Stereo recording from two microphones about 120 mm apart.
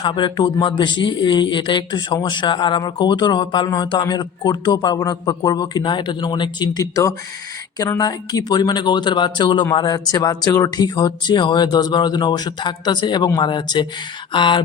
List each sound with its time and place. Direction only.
0.0 s speech: 40° left (ahead or behind)